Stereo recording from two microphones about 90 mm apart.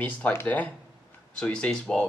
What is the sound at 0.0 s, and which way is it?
Speech, 20° left (ahead or behind).